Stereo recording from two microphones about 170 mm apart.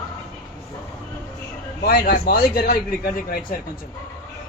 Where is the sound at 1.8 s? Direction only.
65° left (ahead or behind).